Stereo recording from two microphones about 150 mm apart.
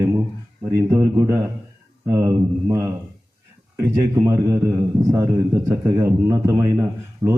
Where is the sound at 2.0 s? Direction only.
20° right (ahead or behind).